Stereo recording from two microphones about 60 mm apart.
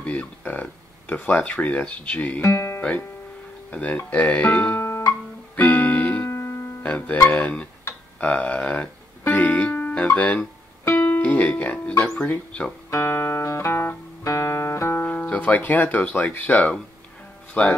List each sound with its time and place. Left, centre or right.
0.0 s speech: left
2.4 s music: left
3.7 s speech: left
4.7 s music: left
5.6 s music: left
6.2 s music: left
6.8 s music: left
7.2 s speech: left
9.2 s music: left
12.2 s speech: left
12.9 s music: left
13.7 s music: left
14.2 s music: left
15.0 s speech: left